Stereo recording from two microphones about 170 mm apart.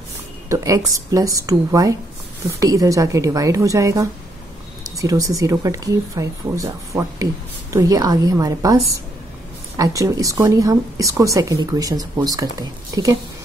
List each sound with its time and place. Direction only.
0.5 s speech: 20° right (ahead or behind)